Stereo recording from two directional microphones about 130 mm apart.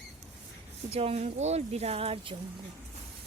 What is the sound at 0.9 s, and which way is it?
Speech, 50° right (ahead or behind).